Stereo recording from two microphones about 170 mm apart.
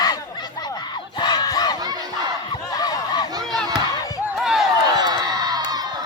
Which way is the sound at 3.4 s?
Centre (ahead or behind).